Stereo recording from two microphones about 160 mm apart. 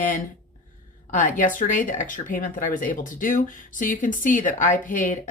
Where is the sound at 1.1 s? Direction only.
55° left (ahead or behind).